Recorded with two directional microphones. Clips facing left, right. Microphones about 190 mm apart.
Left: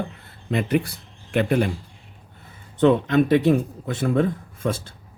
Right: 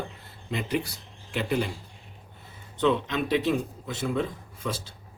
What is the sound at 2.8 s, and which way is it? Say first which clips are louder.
Speech: left 8 dB; 50° left (ahead or behind).